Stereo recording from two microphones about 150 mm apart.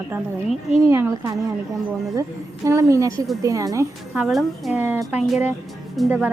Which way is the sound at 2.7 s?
20° right (ahead or behind).